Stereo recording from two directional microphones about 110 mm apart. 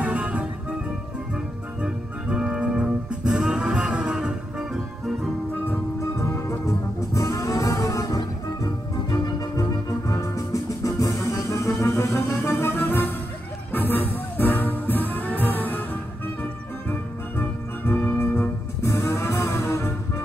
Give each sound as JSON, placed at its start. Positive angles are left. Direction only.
{"t": 0.0, "sound": "music", "side_deg": -10}
{"t": 1.8, "sound": "music", "side_deg": -10}
{"t": 5.7, "sound": "music", "side_deg": 25}
{"t": 7.2, "sound": "brass instrument", "side_deg": 30}
{"t": 9.1, "sound": "organ", "side_deg": 35}
{"t": 13.7, "sound": "music", "side_deg": 15}
{"t": 17.4, "sound": "organ", "side_deg": 20}
{"t": 18.8, "sound": "music", "side_deg": 25}